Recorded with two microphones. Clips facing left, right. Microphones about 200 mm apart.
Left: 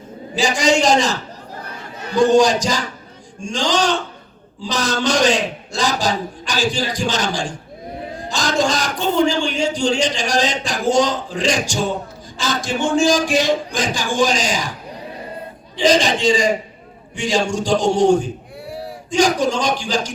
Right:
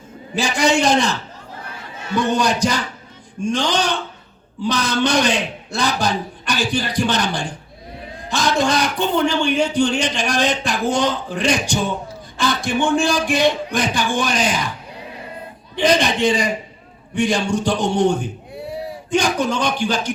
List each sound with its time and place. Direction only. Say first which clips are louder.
0.3 s a man's voice: left 1 dB; 60° right (ahead or behind)
2.1 s a man's voice: left 6 dB; 60° right (ahead or behind)
15.7 s a man's voice: left 1 dB; 60° right (ahead or behind)